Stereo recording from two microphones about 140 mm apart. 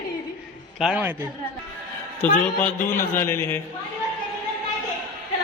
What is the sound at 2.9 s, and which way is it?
Speech, 15° left (ahead or behind).